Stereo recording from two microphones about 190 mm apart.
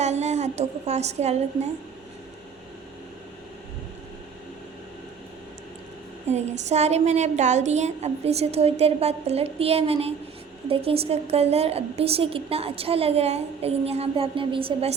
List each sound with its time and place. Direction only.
0.0 s a woman's voice: 35° right (ahead or behind)
6.2 s a woman's voice: 35° right (ahead or behind)